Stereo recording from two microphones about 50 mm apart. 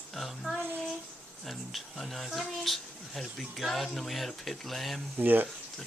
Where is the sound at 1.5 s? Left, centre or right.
Centre.